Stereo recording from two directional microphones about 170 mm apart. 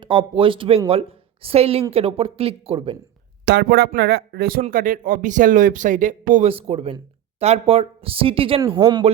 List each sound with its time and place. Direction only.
0.0 s a woman's voice: 30° right (ahead or behind)
3.4 s speech: 85° right; by 4.6 s 65° right (ahead or behind)
4.6 s speech: 50° right (ahead or behind)
6.5 s speech: 35° right (ahead or behind)